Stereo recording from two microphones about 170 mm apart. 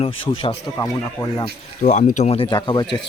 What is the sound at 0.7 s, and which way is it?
Speech, 20° left (ahead or behind).